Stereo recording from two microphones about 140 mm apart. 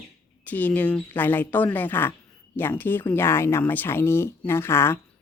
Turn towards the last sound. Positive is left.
turn(degrees=15)  # may be behind; listen again after turning